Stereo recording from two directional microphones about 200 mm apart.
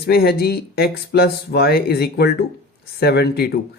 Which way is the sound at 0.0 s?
50° left (ahead or behind).